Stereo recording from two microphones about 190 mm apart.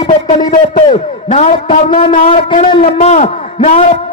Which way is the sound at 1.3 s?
35° left (ahead or behind).